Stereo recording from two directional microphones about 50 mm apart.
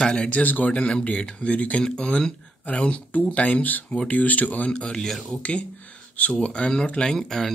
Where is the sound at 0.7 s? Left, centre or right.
Left.